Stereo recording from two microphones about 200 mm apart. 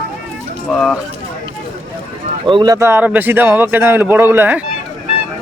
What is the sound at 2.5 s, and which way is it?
Speech, 20° right (ahead or behind).